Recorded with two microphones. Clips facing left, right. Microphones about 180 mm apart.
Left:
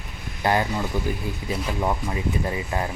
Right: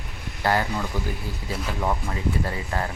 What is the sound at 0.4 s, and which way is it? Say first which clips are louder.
Speech: left 1 dB; 20° left (ahead or behind).